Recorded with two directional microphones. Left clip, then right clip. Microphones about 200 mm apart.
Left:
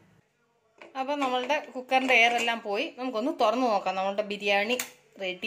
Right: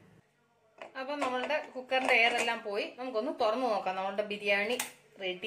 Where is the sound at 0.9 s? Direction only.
45° left (ahead or behind).